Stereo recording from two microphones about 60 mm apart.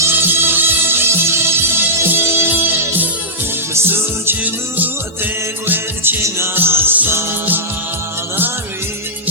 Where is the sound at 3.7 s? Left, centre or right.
Right.